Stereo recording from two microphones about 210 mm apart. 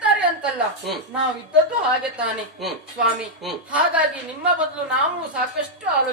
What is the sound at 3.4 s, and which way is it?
A woman's voice, 5° right (ahead or behind).